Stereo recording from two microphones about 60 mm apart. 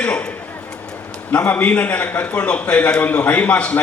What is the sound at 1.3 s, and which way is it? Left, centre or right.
A man's voice, left.